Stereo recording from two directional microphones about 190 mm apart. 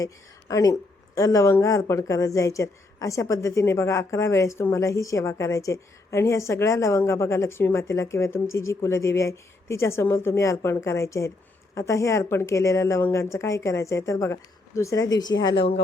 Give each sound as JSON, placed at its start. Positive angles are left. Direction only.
{"t": 0.0, "sound": "speech", "side_deg": 20}